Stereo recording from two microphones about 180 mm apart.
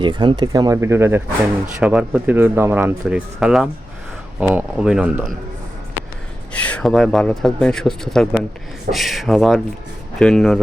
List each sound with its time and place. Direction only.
0.0 s speech: 25° right (ahead or behind); by 5.3 s 5° right (ahead or behind)
6.5 s speech: 5° left (ahead or behind)